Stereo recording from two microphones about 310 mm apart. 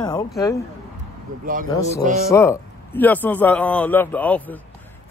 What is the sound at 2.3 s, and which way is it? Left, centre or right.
Speech, centre.